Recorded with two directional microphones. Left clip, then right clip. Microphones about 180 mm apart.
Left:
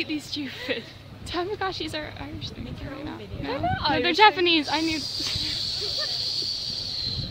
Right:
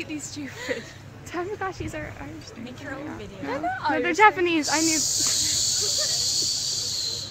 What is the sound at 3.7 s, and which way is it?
Speech, 40° left (ahead or behind).